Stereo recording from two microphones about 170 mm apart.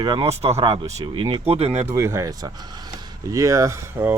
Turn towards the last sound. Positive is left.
turn(degrees=-15)  # may be behind; listen again after turning